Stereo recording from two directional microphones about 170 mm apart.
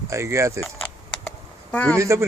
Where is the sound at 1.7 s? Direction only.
10° left (ahead or behind).